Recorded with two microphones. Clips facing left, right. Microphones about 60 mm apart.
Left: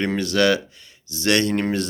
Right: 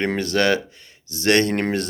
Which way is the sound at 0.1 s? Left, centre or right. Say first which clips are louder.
Left 1 dB; right.